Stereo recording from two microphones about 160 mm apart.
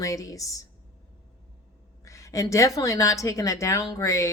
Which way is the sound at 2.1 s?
20° left (ahead or behind).